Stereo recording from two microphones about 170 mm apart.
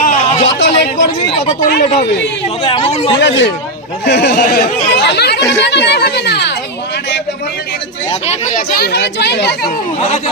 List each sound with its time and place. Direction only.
0.0 s a sound: 45° left (ahead or behind)
0.4 s chatter: 90° left
1.5 s speech: 40° left (ahead or behind)
3.2 s speech: 90° left
5.0 s chatter: 75° left (ahead or behind)
5.5 s speech: 90° left
8.3 s speech: 55° left (ahead or behind); by 9.7 s 75° left (ahead or behind)